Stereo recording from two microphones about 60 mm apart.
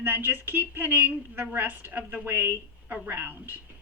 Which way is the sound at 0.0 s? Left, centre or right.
Right.